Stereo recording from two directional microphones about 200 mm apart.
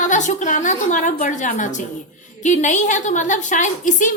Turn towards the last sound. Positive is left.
turn(degrees=40)  # may be behind; listen again after turning